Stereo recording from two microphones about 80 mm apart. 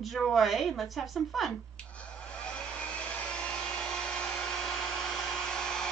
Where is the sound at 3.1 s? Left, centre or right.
Centre.